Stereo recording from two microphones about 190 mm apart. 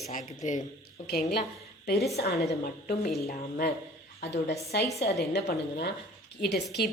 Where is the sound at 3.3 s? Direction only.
50° left (ahead or behind).